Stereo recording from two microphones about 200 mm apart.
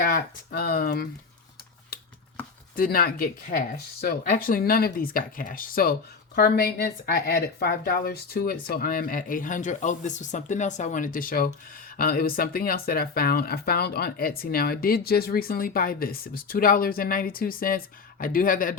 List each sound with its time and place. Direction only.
0.0 s speech: 50° left (ahead or behind)
2.7 s speech: 45° left (ahead or behind)